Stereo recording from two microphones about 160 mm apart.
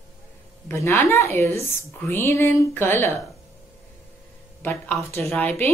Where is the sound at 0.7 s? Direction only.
15° left (ahead or behind).